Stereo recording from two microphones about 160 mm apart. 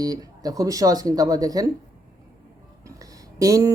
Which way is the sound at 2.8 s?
20° right (ahead or behind).